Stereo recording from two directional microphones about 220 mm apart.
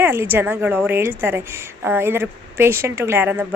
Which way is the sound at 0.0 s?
10° right (ahead or behind).